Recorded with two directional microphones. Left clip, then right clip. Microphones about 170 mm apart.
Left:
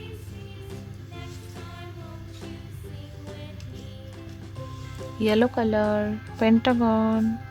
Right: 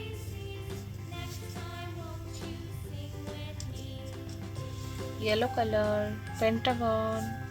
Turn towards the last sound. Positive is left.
turn(degrees=35)  # may be behind; listen again after turning